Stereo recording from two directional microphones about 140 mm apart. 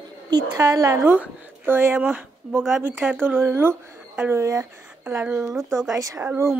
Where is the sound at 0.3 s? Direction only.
25° right (ahead or behind).